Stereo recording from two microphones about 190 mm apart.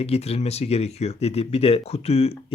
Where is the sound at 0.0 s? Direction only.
35° left (ahead or behind).